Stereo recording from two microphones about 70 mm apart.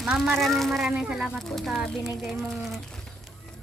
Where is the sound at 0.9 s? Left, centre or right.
Centre.